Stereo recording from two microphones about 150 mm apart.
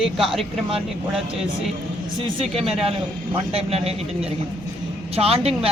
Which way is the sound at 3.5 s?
45° right (ahead or behind).